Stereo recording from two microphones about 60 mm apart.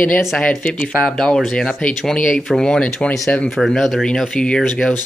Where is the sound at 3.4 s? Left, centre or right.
Centre.